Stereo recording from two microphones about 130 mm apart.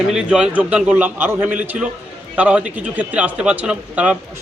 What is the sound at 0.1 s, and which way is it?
A man's voice, 5° right (ahead or behind).